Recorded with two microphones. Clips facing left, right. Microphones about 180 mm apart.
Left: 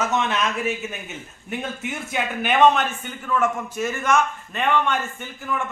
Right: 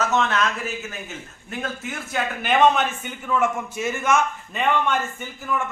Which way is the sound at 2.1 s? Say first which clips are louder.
Right 1 dB; centre (ahead or behind).